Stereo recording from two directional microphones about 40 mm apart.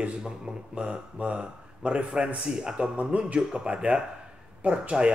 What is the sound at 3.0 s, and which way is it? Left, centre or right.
Speech, right.